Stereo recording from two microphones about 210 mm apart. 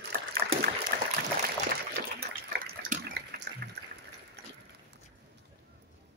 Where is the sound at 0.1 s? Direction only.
45° right (ahead or behind).